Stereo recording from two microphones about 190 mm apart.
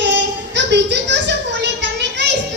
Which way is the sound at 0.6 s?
65° right (ahead or behind).